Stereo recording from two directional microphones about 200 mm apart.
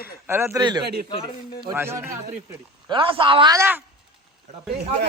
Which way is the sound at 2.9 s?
25° right (ahead or behind).